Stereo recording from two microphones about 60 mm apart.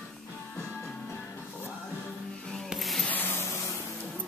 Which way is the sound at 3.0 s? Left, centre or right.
Left.